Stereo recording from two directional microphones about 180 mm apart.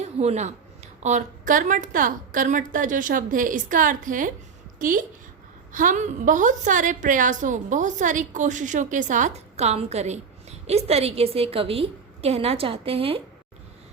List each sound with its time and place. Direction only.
0.0 s a woman's voice: 35° right (ahead or behind)